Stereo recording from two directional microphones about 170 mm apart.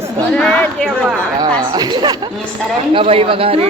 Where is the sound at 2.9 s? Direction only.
35° right (ahead or behind).